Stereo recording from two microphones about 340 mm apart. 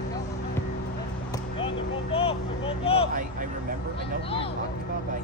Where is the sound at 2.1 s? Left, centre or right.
Centre.